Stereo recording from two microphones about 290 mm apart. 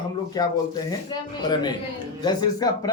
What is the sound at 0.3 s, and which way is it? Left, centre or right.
Speech, centre.